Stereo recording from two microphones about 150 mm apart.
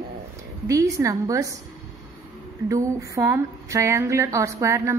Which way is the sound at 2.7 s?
20° right (ahead or behind).